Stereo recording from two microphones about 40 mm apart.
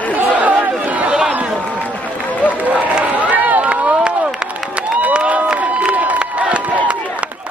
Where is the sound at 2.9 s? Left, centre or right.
Right.